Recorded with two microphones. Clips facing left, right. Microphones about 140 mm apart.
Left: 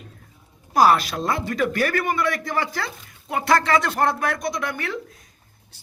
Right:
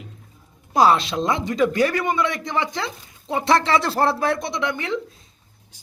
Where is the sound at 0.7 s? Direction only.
25° right (ahead or behind).